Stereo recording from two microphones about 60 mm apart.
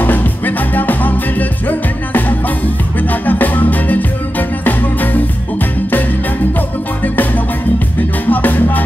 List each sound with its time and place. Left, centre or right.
0.0 s music: left
8.3 s music: left